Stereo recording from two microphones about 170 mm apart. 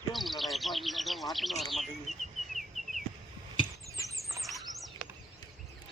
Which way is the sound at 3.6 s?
20° left (ahead or behind).